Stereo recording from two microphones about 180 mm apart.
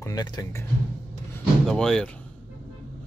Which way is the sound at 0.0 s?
20° left (ahead or behind).